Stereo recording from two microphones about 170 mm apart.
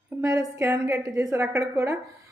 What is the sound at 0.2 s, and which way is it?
Speech, 15° right (ahead or behind).